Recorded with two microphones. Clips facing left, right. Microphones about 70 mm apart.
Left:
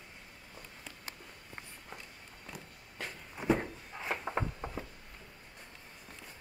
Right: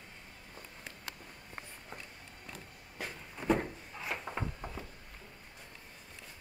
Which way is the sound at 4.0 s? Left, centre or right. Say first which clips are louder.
Left 3 dB; left.